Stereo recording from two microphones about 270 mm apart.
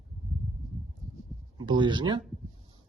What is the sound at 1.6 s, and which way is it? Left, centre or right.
Speech, centre.